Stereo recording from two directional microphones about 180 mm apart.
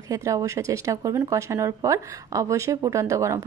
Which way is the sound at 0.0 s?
20° right (ahead or behind).